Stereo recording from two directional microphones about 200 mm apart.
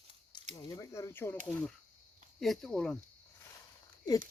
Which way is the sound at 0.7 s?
15° left (ahead or behind).